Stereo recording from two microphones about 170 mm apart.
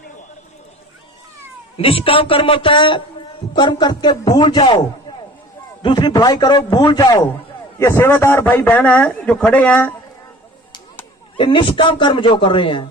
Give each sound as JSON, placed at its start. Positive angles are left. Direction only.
{"t": 1.7, "sound": "a man's voice", "side_deg": 35}
{"t": 5.8, "sound": "a man's voice", "side_deg": 25}
{"t": 11.3, "sound": "a man's voice", "side_deg": 30}